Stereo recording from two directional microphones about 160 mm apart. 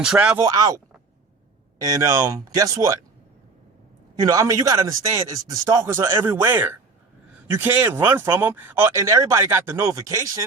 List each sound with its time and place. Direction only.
0.0 s speech: 5° right (ahead or behind)
0.3 s speech: 20° right (ahead or behind)
1.8 s speech: 20° right (ahead or behind)
4.2 s speech: 20° right (ahead or behind)